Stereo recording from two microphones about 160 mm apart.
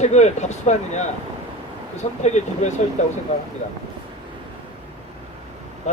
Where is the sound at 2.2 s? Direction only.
45° left (ahead or behind).